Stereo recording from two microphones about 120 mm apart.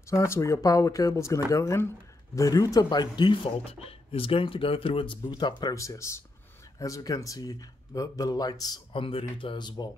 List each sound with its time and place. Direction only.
0.0 s speech: 25° left (ahead or behind)
3.6 s speech: 55° left (ahead or behind); by 8.8 s 35° left (ahead or behind)
8.9 s speech: 45° left (ahead or behind)